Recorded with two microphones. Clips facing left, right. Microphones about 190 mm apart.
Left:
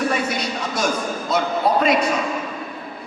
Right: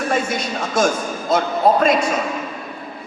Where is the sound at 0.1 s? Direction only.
50° right (ahead or behind).